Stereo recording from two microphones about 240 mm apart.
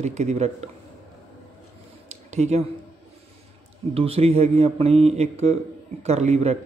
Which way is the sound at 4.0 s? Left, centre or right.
Right.